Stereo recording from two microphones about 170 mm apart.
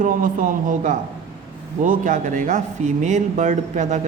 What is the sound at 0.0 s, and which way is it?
Speech, 50° right (ahead or behind).